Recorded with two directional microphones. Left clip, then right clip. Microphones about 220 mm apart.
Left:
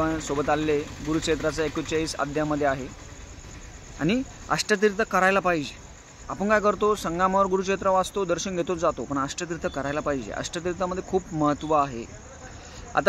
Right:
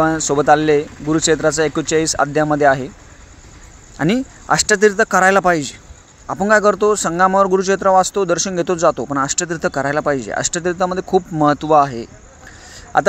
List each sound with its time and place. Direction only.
0.0 s speech: 35° right (ahead or behind)
4.0 s speech: 35° right (ahead or behind)